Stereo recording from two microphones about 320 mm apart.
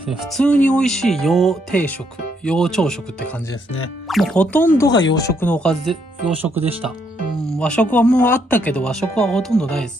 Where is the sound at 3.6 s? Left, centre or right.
Left.